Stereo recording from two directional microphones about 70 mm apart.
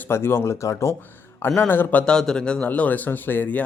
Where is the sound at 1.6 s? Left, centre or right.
Left.